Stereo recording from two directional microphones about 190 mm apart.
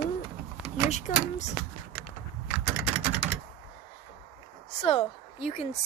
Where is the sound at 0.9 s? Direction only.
35° left (ahead or behind).